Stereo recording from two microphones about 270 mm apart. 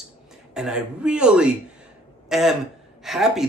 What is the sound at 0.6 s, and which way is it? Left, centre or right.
A man's voice, centre.